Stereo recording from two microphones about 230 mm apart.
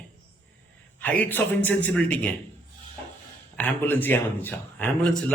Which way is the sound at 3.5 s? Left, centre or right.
Centre.